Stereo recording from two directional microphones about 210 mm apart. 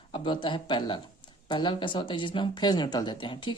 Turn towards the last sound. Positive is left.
turn(degrees=25)  # may be behind; listen again after turning